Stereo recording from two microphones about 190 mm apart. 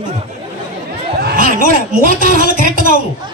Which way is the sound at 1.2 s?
50° right (ahead or behind).